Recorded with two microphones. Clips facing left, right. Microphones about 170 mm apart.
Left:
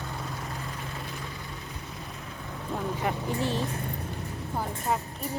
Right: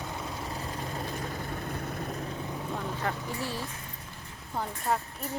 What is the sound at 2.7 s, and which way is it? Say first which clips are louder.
Speech: left 5 dB; 15° left (ahead or behind).